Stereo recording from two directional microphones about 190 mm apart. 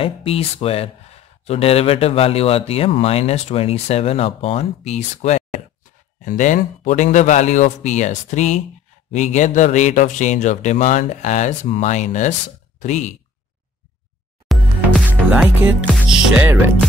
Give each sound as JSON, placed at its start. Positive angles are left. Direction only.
{"t": 0.0, "sound": "speech", "side_deg": 30}
{"t": 14.5, "sound": "music", "side_deg": 0}